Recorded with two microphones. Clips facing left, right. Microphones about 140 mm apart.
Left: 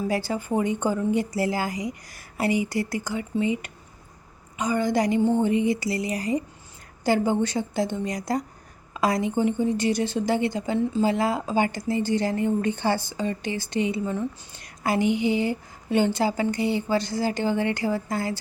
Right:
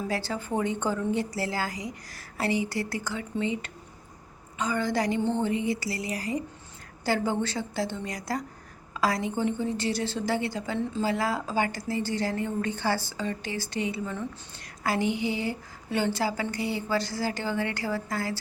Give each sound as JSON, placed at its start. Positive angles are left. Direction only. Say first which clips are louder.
{"t": 0.1, "sound": "a woman's voice", "louder": "left 4 dB", "side_deg": 15}